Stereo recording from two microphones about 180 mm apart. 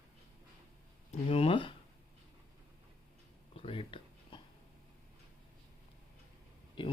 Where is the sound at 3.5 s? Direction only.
30° left (ahead or behind).